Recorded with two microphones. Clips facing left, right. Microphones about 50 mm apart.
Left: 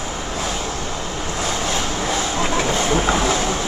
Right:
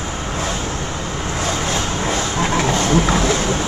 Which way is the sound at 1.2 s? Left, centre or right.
Right.